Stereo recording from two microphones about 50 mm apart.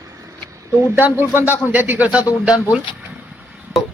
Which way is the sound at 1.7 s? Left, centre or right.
Right.